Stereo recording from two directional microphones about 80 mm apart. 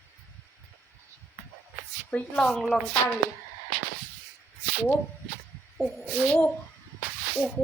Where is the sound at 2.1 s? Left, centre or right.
Left.